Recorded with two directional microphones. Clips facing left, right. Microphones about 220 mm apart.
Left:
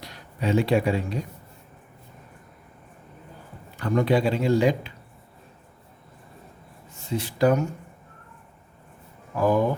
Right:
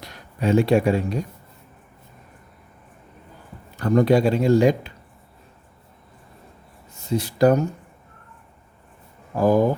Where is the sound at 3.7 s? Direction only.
45° right (ahead or behind).